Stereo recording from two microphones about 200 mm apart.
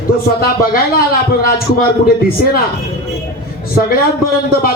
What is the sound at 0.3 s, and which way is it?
Speech, 50° left (ahead or behind).